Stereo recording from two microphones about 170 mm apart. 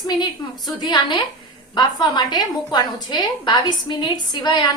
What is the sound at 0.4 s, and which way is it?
A woman's voice, 25° left (ahead or behind).